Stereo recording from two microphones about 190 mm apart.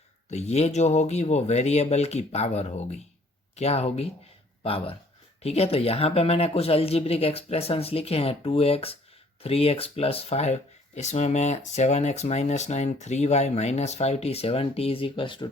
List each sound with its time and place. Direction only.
0.3 s speech: 35° left (ahead or behind)